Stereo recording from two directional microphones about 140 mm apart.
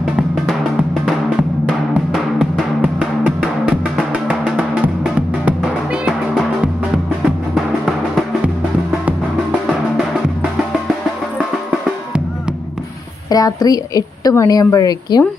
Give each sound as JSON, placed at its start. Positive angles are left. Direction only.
{"t": 0.2, "sound": "music", "side_deg": -5}
{"t": 13.3, "sound": "a woman's voice", "side_deg": 25}